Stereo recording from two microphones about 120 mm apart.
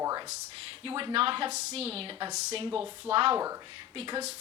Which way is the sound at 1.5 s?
60° right (ahead or behind).